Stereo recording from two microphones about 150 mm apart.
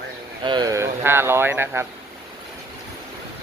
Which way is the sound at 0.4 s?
30° right (ahead or behind).